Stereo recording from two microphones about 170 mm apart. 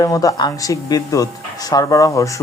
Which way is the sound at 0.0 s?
20° left (ahead or behind).